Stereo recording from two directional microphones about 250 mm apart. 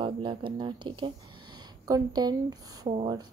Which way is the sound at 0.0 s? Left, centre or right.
Centre.